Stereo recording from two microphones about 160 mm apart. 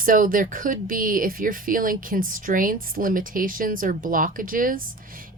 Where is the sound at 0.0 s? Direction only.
60° right (ahead or behind).